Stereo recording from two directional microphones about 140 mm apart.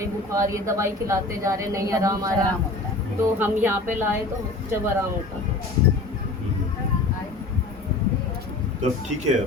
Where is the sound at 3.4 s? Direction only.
15° right (ahead or behind).